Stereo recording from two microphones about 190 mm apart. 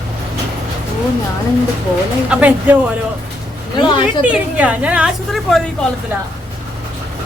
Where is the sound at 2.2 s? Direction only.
5° right (ahead or behind).